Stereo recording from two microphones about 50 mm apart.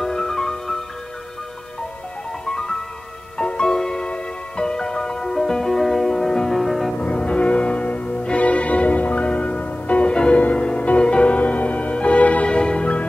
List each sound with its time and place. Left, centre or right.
0.0 s music: centre
2.4 s music: centre
7.0 s music: left